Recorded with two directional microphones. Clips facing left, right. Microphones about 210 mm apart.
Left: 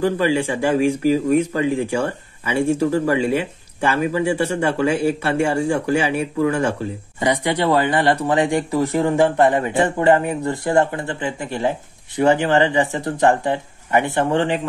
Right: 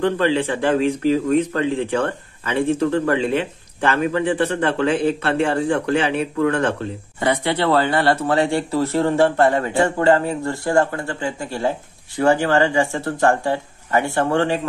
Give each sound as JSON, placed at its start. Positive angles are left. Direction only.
{"t": 0.0, "sound": "speech", "side_deg": 10}